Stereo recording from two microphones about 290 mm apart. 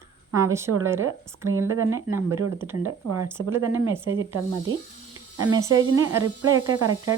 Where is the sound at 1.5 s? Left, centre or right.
Right.